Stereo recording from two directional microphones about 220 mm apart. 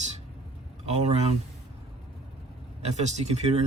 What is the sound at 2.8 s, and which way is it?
Speech, 30° right (ahead or behind).